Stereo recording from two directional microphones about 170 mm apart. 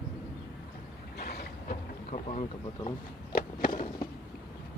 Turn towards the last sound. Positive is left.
turn(degrees=60)  # may be behind; listen again after turning